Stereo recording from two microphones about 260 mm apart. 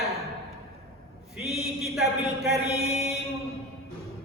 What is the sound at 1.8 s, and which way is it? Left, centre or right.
Speech, centre.